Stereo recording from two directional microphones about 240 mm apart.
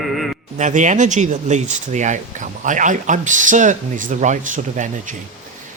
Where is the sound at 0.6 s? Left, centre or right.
Right.